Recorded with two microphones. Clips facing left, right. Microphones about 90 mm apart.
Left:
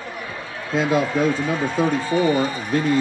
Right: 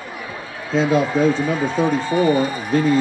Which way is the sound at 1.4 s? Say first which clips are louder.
Right 2 dB; 5° right (ahead or behind).